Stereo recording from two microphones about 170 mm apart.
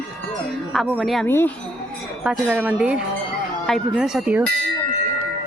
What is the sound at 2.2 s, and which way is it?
Speech, 5° right (ahead or behind).